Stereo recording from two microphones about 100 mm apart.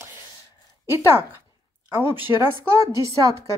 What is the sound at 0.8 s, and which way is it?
Speech, 25° right (ahead or behind).